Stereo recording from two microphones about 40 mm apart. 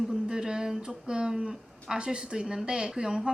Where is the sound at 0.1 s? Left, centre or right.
Centre.